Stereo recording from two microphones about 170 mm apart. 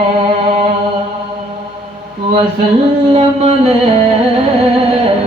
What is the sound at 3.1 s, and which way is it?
Music, 35° right (ahead or behind).